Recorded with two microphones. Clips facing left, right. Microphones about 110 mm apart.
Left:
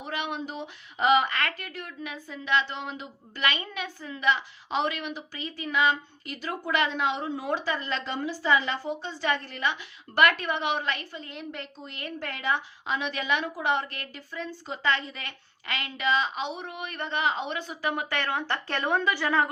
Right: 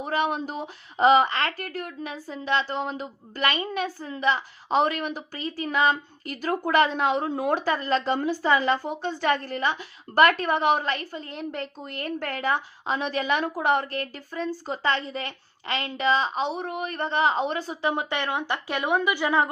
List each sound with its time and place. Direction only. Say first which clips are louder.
0.0 s a woman's voice: right 7 dB; 40° right (ahead or behind); by 19.5 s 15° right (ahead or behind)